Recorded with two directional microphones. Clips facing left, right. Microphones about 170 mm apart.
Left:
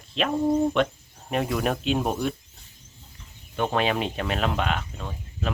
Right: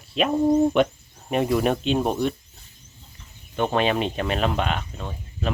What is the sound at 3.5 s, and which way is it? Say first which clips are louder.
Speech: right 2 dB; centre (ahead or behind).